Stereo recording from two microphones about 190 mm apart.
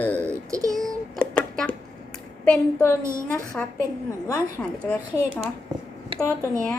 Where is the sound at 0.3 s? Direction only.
20° right (ahead or behind).